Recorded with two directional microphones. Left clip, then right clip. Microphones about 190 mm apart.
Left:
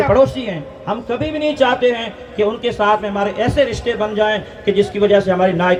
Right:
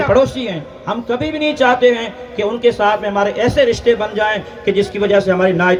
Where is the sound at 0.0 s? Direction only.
40° right (ahead or behind).